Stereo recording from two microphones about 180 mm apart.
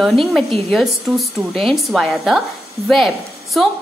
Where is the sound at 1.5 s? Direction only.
Centre (ahead or behind).